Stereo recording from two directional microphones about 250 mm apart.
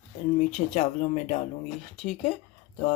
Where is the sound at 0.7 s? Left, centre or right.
Left.